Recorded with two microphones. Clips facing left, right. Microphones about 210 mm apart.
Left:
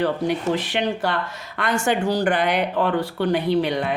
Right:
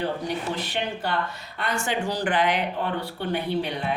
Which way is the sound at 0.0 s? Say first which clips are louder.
Left 6 dB; 90° left.